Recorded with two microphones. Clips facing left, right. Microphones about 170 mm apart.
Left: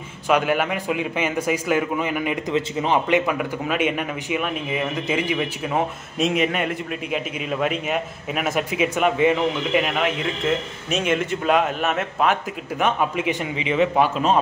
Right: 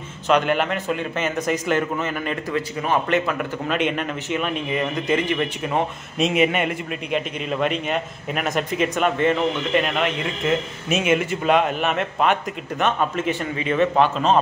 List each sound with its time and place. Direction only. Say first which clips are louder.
0.3 s a man's voice: right 1 dB; 5° left (ahead or behind)